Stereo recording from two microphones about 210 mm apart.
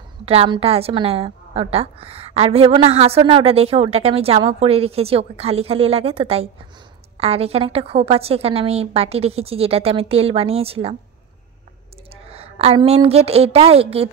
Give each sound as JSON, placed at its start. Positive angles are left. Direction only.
{"t": 0.2, "sound": "a woman's voice", "side_deg": -30}
{"t": 12.3, "sound": "a woman's voice", "side_deg": -30}